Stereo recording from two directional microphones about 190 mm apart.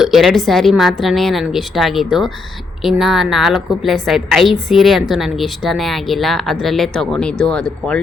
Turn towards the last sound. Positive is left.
turn(degrees=5)  # may be behind; listen again after turning